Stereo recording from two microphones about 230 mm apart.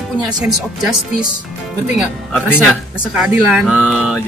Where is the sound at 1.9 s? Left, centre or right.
Centre.